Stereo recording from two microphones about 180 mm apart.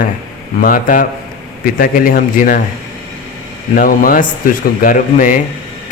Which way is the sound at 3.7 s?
50° left (ahead or behind).